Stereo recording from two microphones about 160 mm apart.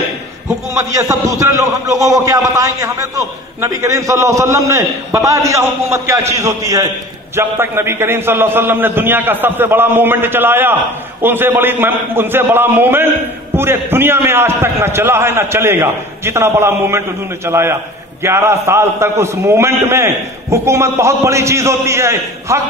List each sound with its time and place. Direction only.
0.5 s a man's voice: 20° right (ahead or behind)